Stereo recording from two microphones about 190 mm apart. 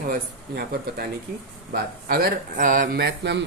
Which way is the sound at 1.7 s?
50° right (ahead or behind).